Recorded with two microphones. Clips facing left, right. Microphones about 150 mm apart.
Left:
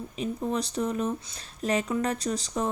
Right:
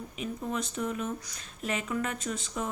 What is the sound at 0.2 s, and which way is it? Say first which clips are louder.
A woman's voice: left 5 dB; 35° left (ahead or behind).